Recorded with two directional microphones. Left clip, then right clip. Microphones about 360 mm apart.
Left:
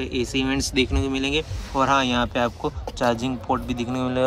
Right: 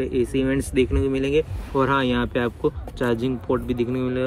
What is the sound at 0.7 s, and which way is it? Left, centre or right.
Speech, centre.